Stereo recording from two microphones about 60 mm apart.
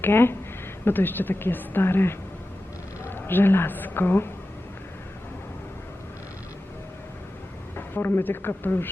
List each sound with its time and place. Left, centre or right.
0.0 s a woman's voice: left
7.8 s speech: left